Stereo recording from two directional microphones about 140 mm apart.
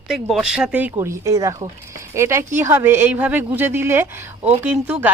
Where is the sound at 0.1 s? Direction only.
5° right (ahead or behind).